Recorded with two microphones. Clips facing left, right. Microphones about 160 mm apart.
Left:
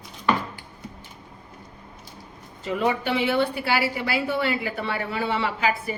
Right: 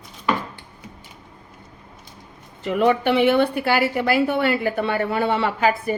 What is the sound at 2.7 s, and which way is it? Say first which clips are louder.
A woman's voice: right 6 dB; 65° right (ahead or behind).